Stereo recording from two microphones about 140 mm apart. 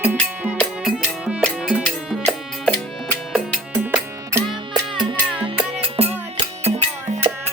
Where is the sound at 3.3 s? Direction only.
10° right (ahead or behind).